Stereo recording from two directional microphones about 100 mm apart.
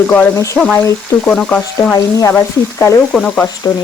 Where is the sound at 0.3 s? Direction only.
30° left (ahead or behind).